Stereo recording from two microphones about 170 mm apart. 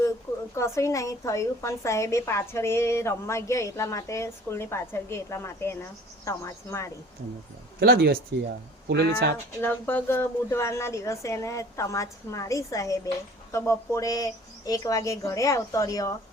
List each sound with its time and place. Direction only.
0.5 s a woman's voice: 15° left (ahead or behind)
7.8 s speech: 70° right (ahead or behind)
8.9 s speech: 80° right
9.6 s a woman's voice: 10° left (ahead or behind)